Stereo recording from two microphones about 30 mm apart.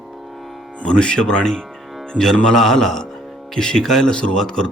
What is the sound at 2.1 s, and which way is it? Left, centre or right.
Music, centre.